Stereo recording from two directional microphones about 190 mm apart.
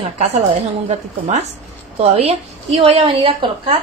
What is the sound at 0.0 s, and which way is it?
A woman's voice, 30° right (ahead or behind).